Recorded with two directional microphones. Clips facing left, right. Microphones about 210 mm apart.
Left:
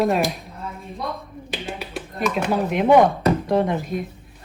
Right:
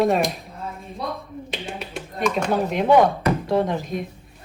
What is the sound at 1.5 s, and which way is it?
Finger snapping, centre (ahead or behind).